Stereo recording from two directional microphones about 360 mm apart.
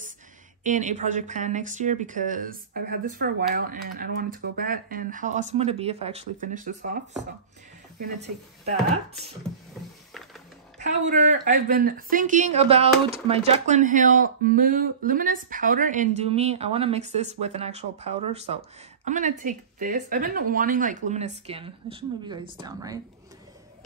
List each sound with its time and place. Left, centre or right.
0.7 s speech: centre
8.0 s speech: centre
10.8 s speech: right